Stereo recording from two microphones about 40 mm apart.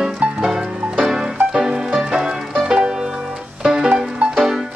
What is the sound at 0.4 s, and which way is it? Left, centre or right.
Music, centre.